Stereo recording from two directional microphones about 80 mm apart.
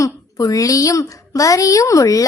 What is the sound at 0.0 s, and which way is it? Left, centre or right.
A woman's voice, left.